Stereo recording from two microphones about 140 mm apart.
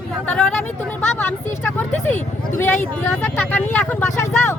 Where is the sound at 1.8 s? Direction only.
15° left (ahead or behind).